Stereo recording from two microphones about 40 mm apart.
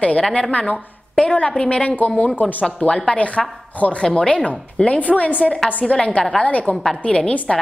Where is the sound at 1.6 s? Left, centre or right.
Left.